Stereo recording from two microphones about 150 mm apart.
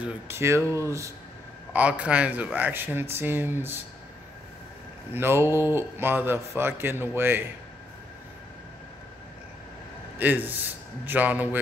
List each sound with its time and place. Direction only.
0.0 s speech: 15° right (ahead or behind)
1.7 s a man's voice: 10° right (ahead or behind)
5.1 s a man's voice: 15° right (ahead or behind)
10.1 s a man's voice: 10° right (ahead or behind)